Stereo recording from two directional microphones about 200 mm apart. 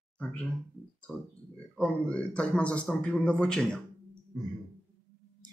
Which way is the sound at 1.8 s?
5° left (ahead or behind).